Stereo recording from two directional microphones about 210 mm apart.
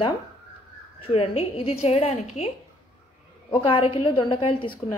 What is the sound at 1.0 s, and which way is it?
A woman's voice, 25° left (ahead or behind).